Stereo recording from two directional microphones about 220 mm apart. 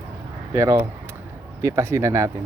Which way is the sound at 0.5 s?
15° right (ahead or behind).